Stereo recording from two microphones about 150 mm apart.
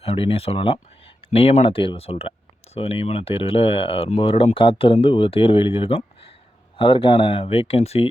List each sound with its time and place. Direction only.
0.0 s speech: 40° left (ahead or behind)